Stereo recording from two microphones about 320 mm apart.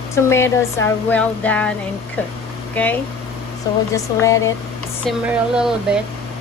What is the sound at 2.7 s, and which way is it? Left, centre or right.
Speech, centre.